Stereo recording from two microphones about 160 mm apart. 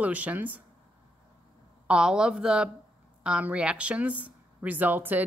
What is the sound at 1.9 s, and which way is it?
A woman's voice, 5° right (ahead or behind).